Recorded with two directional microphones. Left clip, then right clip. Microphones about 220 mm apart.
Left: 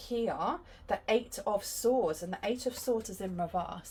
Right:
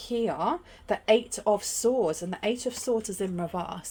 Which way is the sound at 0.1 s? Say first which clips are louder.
Right 5 dB; 55° right (ahead or behind).